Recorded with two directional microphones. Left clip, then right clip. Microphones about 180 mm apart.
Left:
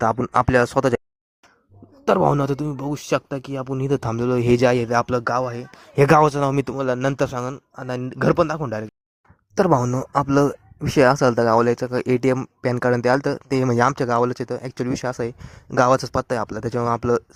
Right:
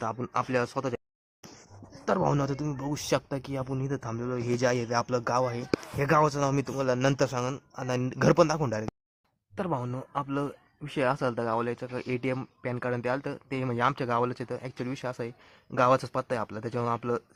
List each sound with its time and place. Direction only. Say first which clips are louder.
0.0 s speech: left 12 dB; 45° left (ahead or behind)
2.0 s a man's voice: left 9 dB; 30° left (ahead or behind)
3.8 s a man's voice: left 11 dB; 40° left (ahead or behind)
5.2 s speech: left 5 dB; 20° left (ahead or behind)
6.0 s a man's voice: left 10 dB; 50° left (ahead or behind); by 8.9 s 20° left (ahead or behind)
9.6 s a man's voice: left 14 dB; 40° left (ahead or behind)
10.1 s speech: left 14 dB; 50° left (ahead or behind)